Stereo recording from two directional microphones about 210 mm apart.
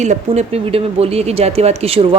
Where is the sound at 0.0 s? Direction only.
35° right (ahead or behind).